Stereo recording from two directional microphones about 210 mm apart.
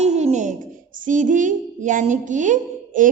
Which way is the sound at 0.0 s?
30° right (ahead or behind).